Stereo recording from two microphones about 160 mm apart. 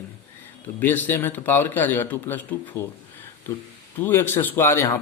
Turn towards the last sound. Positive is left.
turn(degrees=15)  # may be behind; listen again after turning